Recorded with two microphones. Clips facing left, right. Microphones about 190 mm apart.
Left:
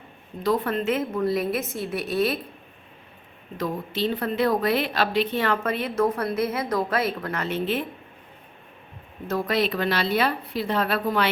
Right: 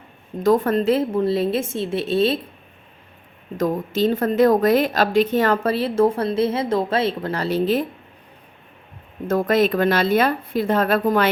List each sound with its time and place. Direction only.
0.4 s a woman's voice: 45° right (ahead or behind); by 2.4 s 25° right (ahead or behind)
3.6 s a woman's voice: 45° right (ahead or behind)
9.2 s speech: 50° right (ahead or behind)